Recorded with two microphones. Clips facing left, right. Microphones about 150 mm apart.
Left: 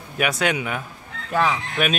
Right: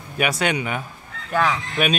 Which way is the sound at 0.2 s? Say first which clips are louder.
Even; centre (ahead or behind).